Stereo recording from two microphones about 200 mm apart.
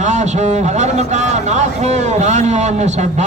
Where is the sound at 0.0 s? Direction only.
35° right (ahead or behind).